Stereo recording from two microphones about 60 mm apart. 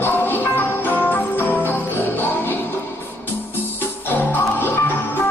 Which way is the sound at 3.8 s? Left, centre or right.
Left.